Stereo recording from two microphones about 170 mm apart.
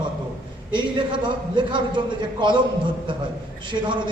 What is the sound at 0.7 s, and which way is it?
A man's voice, 25° right (ahead or behind).